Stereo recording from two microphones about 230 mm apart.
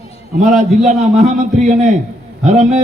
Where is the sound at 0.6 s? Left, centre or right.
Right.